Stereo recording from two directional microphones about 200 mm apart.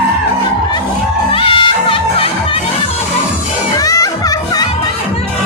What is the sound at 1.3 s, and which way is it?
Music, 25° left (ahead or behind).